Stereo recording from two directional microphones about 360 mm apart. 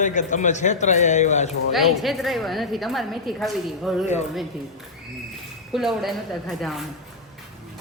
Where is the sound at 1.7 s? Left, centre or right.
Centre.